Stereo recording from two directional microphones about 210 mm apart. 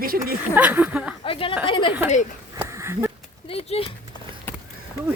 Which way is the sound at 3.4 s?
25° left (ahead or behind).